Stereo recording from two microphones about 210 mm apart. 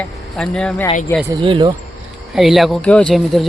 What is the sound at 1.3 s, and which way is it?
Speech, 25° right (ahead or behind).